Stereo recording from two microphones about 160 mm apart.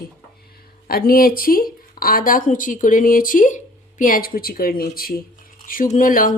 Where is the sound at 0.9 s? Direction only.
65° left (ahead or behind).